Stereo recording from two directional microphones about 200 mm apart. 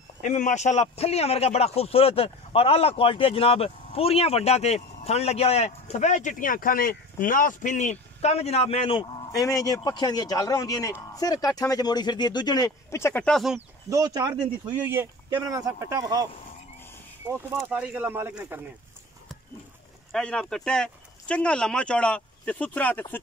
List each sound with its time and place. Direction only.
0.2 s a man's voice: 35° left (ahead or behind); by 13.6 s centre (ahead or behind)
13.8 s speech: 15° right (ahead or behind)
17.3 s speech: 15° right (ahead or behind)
20.1 s speech: 5° left (ahead or behind)